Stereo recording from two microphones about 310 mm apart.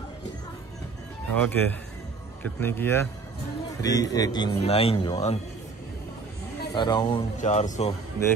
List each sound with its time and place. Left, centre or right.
1.3 s speech: centre
6.7 s speech: centre